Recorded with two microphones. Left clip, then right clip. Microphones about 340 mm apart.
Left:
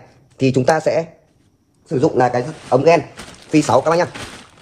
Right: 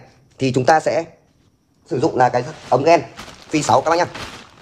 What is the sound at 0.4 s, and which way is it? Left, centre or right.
A man's voice, right.